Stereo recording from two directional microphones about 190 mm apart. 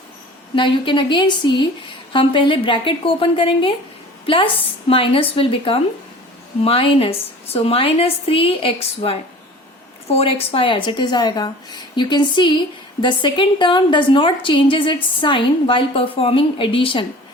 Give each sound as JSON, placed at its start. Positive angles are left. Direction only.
{"t": 0.5, "sound": "a woman's voice", "side_deg": 25}